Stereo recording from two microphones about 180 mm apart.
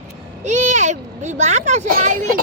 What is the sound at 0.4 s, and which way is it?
Speech, 40° right (ahead or behind).